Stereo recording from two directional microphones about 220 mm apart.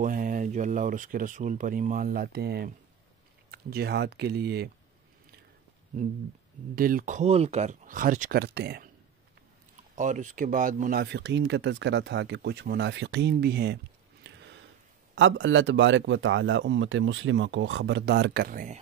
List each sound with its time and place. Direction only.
0.0 s speech: 35° right (ahead or behind)
6.7 s speech: 40° right (ahead or behind)
9.9 s speech: 35° right (ahead or behind)
14.2 s a sound: 55° right (ahead or behind)
15.1 s a man's voice: 60° right (ahead or behind); by 18.8 s 40° right (ahead or behind)